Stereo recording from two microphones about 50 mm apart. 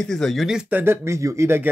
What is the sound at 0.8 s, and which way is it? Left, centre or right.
Speech, right.